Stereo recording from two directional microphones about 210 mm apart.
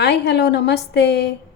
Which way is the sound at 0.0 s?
55° left (ahead or behind).